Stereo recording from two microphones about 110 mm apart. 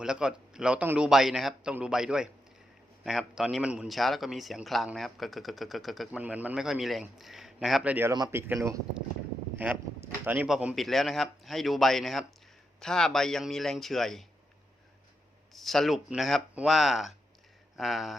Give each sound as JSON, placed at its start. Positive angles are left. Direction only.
{"t": 0.0, "sound": "a man's voice", "side_deg": -5}
{"t": 6.1, "sound": "a man's voice", "side_deg": -10}
{"t": 8.3, "sound": "speech", "side_deg": -20}
{"t": 10.8, "sound": "a man's voice", "side_deg": 0}
{"t": 15.5, "sound": "a man's voice", "side_deg": 0}